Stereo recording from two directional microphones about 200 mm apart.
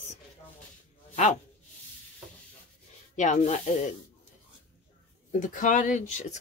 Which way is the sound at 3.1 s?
35° left (ahead or behind).